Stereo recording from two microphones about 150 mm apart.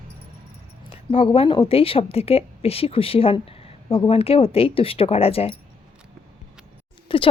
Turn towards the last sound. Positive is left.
turn(degrees=35)  # may be behind; listen again after turning